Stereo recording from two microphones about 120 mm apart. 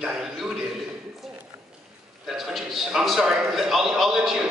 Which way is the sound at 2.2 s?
5° right (ahead or behind).